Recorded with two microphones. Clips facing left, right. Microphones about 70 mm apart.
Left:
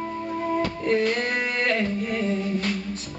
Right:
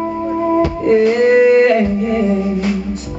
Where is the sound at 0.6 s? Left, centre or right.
Centre.